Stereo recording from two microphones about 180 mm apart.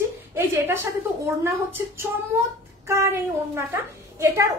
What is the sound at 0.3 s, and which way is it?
A woman's voice, 15° right (ahead or behind).